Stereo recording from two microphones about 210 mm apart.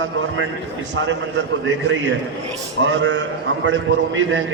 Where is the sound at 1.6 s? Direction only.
60° right (ahead or behind).